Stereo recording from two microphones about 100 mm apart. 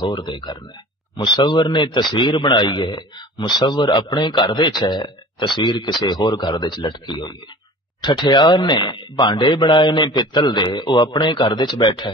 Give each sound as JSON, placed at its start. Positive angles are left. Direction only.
{"t": 0.0, "sound": "a man's voice", "side_deg": 50}